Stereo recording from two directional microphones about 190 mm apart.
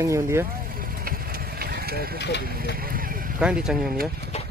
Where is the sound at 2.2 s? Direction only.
65° left (ahead or behind).